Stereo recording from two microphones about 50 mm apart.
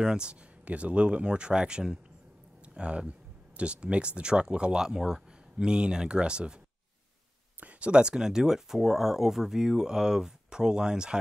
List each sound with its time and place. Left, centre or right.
0.0 s speech: centre
7.6 s speech: right